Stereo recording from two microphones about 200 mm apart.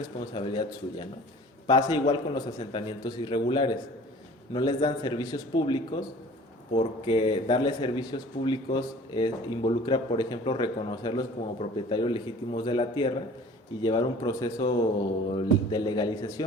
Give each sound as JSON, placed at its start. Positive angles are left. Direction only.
{"t": 0.3, "sound": "speech", "side_deg": 25}